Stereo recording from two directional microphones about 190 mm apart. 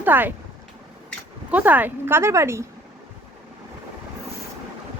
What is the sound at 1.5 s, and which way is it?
A woman's voice, 10° right (ahead or behind).